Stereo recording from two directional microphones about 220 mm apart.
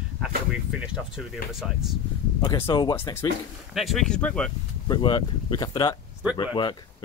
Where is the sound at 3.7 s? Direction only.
Centre (ahead or behind).